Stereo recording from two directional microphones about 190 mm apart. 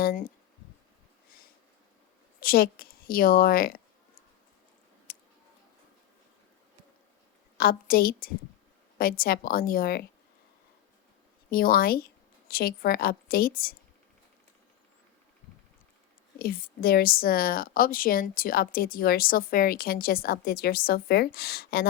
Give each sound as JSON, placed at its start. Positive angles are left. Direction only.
{"t": 0.0, "sound": "a woman's voice", "side_deg": 50}
{"t": 2.4, "sound": "a woman's voice", "side_deg": 50}
{"t": 7.6, "sound": "a woman's voice", "side_deg": 50}
{"t": 11.5, "sound": "a woman's voice", "side_deg": 50}
{"t": 16.4, "sound": "a woman's voice", "side_deg": 55}